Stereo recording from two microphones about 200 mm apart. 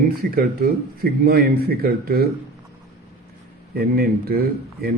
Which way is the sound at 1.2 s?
50° right (ahead or behind).